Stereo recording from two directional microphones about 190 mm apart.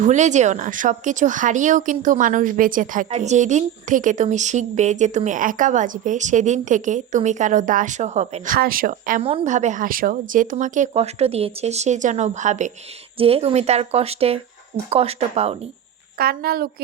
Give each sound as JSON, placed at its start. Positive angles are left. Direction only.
{"t": 0.0, "sound": "speech", "side_deg": -40}
{"t": 9.2, "sound": "speech", "side_deg": -35}
{"t": 16.1, "sound": "a woman's voice", "side_deg": -50}